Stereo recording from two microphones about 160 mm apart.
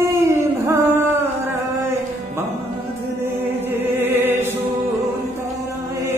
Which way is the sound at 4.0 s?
15° right (ahead or behind).